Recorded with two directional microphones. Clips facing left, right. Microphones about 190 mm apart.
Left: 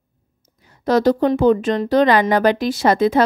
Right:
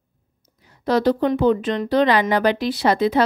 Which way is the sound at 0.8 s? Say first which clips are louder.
Left 3 dB; 45° left (ahead or behind).